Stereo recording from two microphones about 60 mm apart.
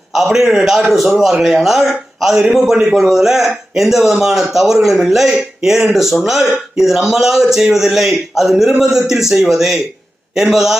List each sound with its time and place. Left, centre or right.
0.1 s speech: centre